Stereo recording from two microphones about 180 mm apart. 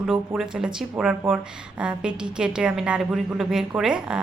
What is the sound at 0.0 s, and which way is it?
A woman's voice, 5° right (ahead or behind).